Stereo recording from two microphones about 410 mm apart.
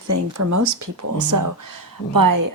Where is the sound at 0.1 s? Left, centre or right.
Right.